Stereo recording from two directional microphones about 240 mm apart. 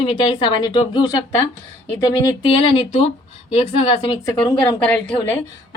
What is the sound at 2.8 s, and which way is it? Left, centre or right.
Speech, left.